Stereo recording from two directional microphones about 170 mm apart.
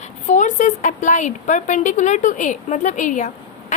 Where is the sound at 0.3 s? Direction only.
45° left (ahead or behind).